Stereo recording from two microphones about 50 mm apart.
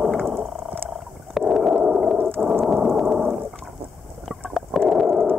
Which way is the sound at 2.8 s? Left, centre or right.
Centre.